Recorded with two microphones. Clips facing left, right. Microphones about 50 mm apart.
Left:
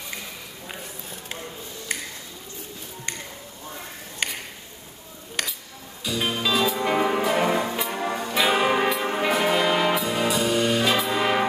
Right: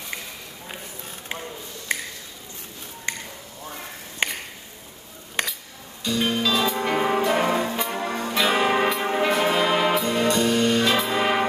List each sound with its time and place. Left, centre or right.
4.2 s a sound: right
5.4 s cutlery: centre
6.0 s music: centre